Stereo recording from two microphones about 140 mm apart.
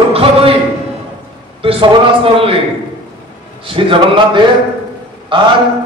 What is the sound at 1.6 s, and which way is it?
Speech, 40° right (ahead or behind).